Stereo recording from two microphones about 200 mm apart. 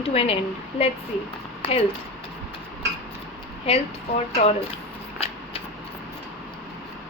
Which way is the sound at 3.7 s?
25° left (ahead or behind).